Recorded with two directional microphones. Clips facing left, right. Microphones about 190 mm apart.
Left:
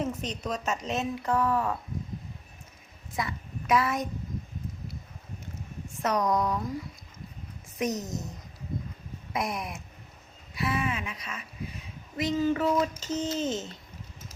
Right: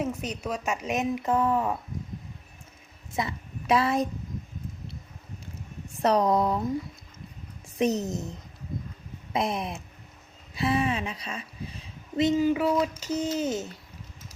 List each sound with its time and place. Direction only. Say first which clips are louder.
0.0 s a woman's voice: right 1 dB; 10° right (ahead or behind)
3.1 s a woman's voice: right 2 dB; 25° right (ahead or behind)
6.0 s speech: right 4 dB; 30° right (ahead or behind)
7.8 s speech: right 5 dB; 30° right (ahead or behind)
9.3 s speech: right 4 dB; 25° right (ahead or behind)
12.4 s a woman's voice: right 2 dB; 10° right (ahead or behind)